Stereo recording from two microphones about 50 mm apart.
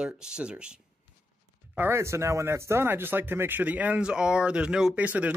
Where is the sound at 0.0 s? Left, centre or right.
Centre.